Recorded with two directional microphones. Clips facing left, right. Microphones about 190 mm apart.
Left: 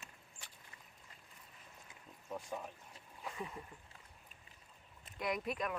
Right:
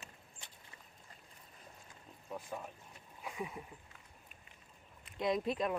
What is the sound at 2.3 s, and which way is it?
Speech, centre (ahead or behind).